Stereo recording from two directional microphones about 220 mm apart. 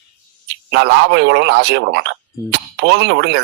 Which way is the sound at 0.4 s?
50° right (ahead or behind).